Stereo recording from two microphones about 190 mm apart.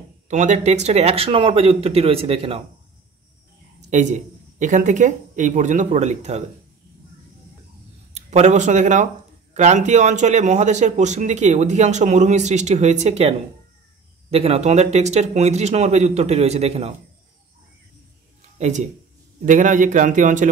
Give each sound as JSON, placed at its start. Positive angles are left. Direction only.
{"t": 0.3, "sound": "a man's voice", "side_deg": -40}
{"t": 3.9, "sound": "a man's voice", "side_deg": -40}
{"t": 8.1, "sound": "a man's voice", "side_deg": -35}
{"t": 18.6, "sound": "a man's voice", "side_deg": -40}